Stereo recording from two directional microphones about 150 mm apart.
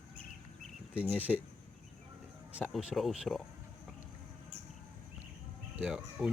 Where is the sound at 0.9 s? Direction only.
10° right (ahead or behind).